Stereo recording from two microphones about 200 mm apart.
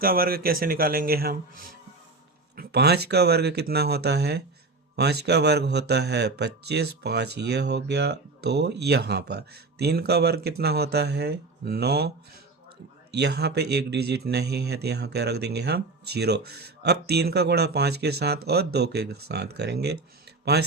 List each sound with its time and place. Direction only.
0.0 s a man's voice: 45° right (ahead or behind)
2.6 s a man's voice: 55° right (ahead or behind)
13.1 s a man's voice: 55° right (ahead or behind)